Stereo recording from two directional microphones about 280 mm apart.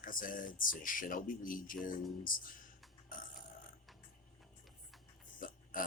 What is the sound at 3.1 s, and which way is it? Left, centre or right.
Burping, left.